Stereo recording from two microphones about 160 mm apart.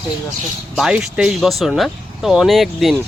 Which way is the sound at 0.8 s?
5° right (ahead or behind).